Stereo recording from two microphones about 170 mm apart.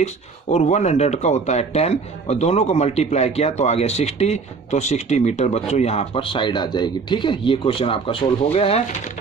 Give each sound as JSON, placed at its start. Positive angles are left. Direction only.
{"t": 0.0, "sound": "speech", "side_deg": 40}